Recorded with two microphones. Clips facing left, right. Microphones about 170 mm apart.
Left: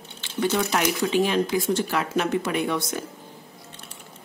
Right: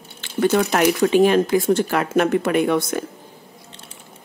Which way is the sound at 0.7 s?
55° right (ahead or behind).